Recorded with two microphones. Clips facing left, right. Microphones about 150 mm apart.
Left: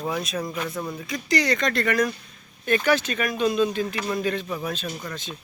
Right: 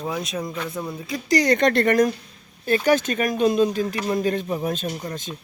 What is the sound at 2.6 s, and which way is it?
A man's voice, 40° right (ahead or behind).